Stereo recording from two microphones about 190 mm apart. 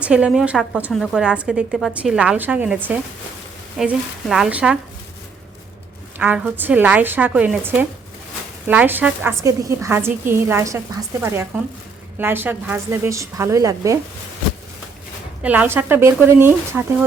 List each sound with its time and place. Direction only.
0.0 s a woman's voice: 5° right (ahead or behind)
6.1 s a woman's voice: 10° right (ahead or behind)
15.4 s a woman's voice: 10° right (ahead or behind)